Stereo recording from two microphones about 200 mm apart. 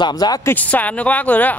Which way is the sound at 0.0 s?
20° left (ahead or behind).